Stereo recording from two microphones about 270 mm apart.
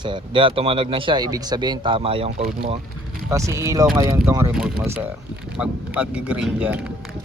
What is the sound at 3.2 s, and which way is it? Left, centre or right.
Speech, centre.